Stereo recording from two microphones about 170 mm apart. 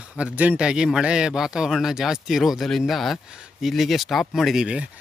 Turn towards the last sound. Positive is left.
turn(degrees=-5)  # may be behind; listen again after turning